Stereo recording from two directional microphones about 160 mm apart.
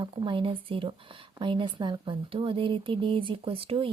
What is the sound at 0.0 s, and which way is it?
Speech, 30° right (ahead or behind).